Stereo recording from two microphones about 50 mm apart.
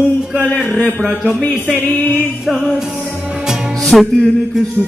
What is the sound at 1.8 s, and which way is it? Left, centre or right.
Music, left.